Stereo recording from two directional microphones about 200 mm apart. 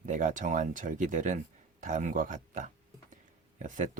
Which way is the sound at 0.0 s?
40° right (ahead or behind).